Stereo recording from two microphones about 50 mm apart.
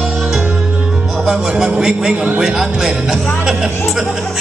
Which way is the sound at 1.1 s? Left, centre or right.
Centre.